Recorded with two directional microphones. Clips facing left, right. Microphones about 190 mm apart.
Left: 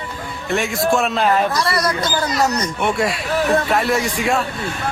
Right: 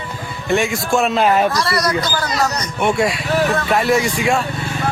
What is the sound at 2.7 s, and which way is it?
A man's voice, centre (ahead or behind).